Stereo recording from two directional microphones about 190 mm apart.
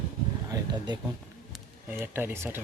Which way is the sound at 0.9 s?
25° right (ahead or behind).